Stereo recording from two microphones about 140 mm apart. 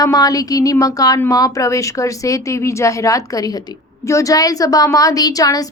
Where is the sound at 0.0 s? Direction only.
25° left (ahead or behind).